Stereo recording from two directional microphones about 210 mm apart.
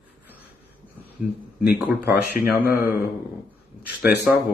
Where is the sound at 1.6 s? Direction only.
5° right (ahead or behind).